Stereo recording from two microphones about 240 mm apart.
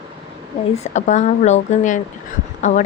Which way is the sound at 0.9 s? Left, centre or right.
Left.